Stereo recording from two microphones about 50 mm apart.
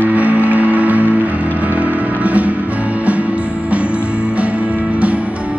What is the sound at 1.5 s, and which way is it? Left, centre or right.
Vehicle, right.